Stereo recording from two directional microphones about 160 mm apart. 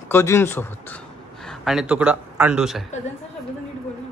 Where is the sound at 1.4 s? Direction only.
5° right (ahead or behind).